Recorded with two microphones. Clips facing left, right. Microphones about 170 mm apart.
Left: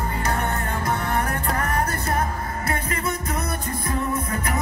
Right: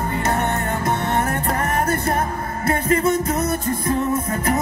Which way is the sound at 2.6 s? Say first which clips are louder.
Right 10 dB; 25° right (ahead or behind).